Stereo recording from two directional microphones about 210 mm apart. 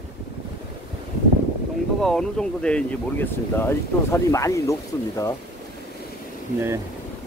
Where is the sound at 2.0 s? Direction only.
5° left (ahead or behind).